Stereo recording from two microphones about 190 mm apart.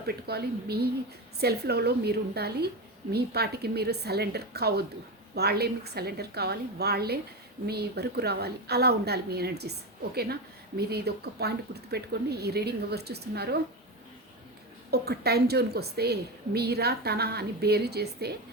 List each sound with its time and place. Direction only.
0.3 s speech: 55° right (ahead or behind)
14.8 s speech: 55° right (ahead or behind)